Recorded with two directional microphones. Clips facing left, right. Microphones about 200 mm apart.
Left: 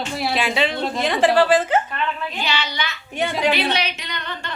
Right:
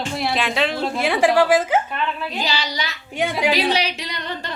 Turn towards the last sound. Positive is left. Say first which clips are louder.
# right 2 dB
turn(degrees=-35)  # may be behind; listen again after turning